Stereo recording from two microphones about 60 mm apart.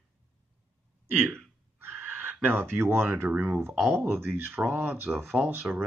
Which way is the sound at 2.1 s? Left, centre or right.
Right.